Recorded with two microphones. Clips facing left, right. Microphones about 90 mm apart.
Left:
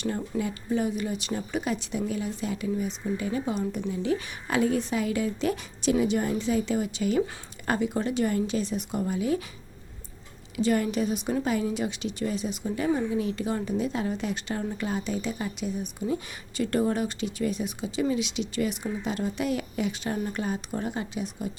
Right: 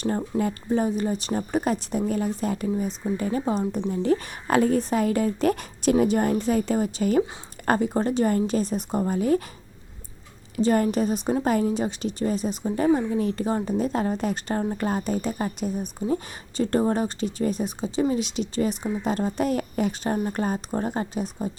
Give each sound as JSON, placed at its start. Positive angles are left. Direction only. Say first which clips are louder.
{"t": 0.0, "sound": "speech", "louder": "right 4 dB", "side_deg": -40}
{"t": 10.6, "sound": "speech", "louder": "right 4 dB", "side_deg": -40}